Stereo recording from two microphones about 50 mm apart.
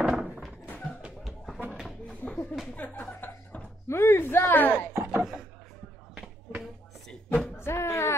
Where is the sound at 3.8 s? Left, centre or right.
Left.